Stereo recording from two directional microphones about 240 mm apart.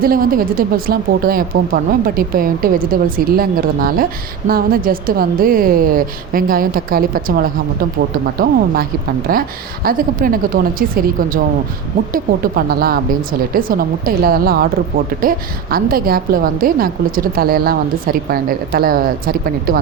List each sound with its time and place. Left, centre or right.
0.0 s a woman's voice: right